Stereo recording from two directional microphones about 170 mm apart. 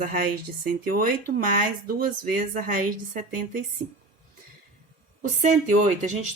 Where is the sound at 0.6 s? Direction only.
55° right (ahead or behind).